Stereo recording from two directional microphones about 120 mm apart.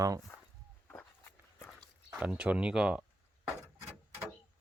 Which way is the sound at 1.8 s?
5° right (ahead or behind).